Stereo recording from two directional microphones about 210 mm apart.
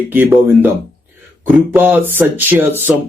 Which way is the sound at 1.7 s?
10° right (ahead or behind).